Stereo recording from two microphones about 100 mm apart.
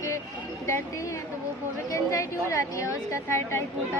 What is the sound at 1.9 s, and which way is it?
Speech, 30° left (ahead or behind).